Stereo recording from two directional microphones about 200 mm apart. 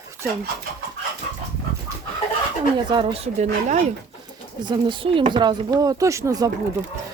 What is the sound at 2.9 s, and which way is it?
Speech, 25° right (ahead or behind).